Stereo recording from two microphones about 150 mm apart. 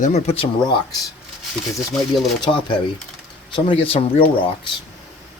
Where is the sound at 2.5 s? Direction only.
30° left (ahead or behind).